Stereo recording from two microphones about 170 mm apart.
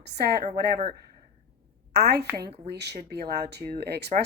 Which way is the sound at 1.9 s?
75° right (ahead or behind).